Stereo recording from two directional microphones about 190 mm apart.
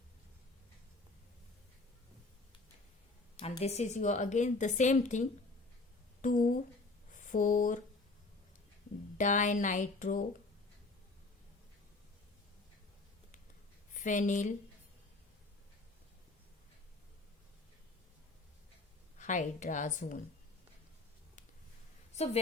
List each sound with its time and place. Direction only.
3.3 s a woman's voice: 30° left (ahead or behind)
9.1 s a woman's voice: 40° left (ahead or behind)
13.9 s speech: 40° left (ahead or behind)
19.2 s a woman's voice: 40° left (ahead or behind)
22.1 s a sound: 35° left (ahead or behind)